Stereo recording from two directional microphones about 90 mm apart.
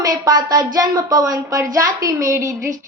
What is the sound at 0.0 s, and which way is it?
A woman's voice, 45° right (ahead or behind).